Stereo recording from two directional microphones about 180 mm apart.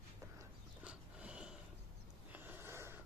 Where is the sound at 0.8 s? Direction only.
5° right (ahead or behind).